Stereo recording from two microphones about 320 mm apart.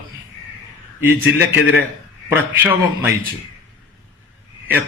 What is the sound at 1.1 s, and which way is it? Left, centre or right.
Speech, left.